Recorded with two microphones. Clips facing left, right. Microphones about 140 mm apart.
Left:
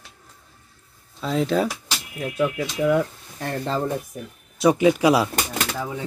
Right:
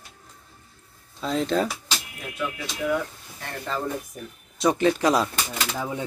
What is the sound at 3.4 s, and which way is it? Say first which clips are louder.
Speech: left 6 dB; 30° left (ahead or behind).